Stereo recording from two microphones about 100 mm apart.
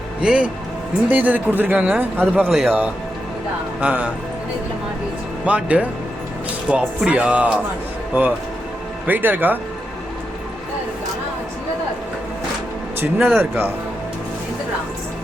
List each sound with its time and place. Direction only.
0.2 s speech: 10° right (ahead or behind)
2.5 s a man's voice: 5° right (ahead or behind)
3.8 s speech: 10° right (ahead or behind)
5.5 s speech: 15° right (ahead or behind)
9.0 s speech: 20° right (ahead or behind)
13.1 s a man's voice: centre (ahead or behind)
13.4 s speech: 20° right (ahead or behind)